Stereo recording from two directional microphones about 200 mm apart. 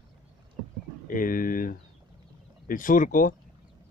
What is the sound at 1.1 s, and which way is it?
Speech, 45° left (ahead or behind).